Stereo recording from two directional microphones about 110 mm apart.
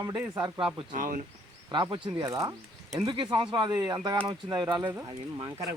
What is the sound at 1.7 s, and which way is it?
Speech, 45° right (ahead or behind).